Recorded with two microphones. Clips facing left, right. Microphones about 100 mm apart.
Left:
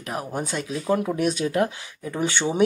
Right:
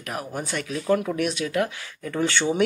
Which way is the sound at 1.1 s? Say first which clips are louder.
Left 2 dB; 35° left (ahead or behind).